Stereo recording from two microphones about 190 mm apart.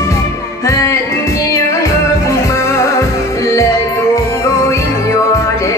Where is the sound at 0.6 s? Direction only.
15° left (ahead or behind).